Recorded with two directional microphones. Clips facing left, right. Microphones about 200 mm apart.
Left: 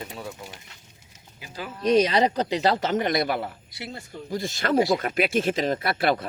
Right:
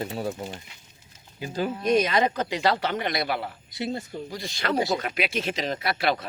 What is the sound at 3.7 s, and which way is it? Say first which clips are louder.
Speech: right 7 dB; 20° right (ahead or behind).